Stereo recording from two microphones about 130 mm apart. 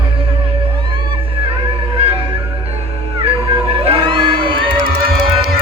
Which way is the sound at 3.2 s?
45° right (ahead or behind).